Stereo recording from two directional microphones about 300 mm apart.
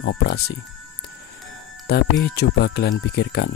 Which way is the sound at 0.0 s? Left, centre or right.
Left.